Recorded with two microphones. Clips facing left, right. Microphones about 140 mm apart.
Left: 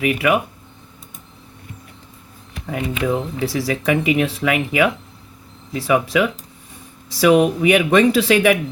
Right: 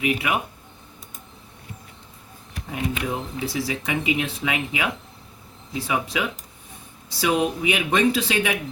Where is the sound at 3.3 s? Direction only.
90° left.